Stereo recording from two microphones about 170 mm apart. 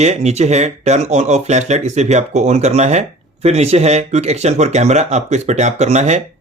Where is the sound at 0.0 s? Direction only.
40° right (ahead or behind).